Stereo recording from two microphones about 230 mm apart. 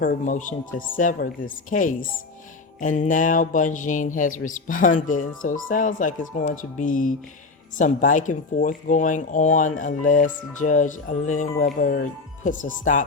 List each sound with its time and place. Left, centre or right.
0.0 s speech: left